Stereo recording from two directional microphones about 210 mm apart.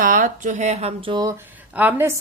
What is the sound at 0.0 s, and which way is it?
Speech, 40° right (ahead or behind).